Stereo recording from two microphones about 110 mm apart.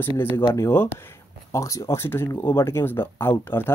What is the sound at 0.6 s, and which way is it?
Speech, 25° left (ahead or behind).